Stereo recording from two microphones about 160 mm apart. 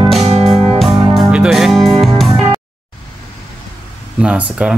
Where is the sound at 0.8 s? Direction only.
5° right (ahead or behind).